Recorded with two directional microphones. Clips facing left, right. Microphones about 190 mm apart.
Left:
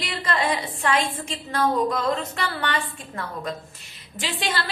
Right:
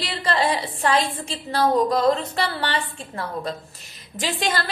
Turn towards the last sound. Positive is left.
turn(degrees=-45)  # may be behind; listen again after turning